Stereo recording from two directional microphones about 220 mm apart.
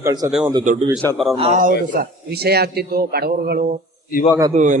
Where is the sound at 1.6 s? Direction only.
40° right (ahead or behind).